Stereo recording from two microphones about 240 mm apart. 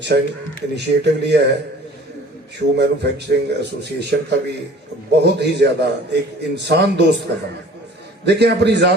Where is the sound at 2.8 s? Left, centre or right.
Right.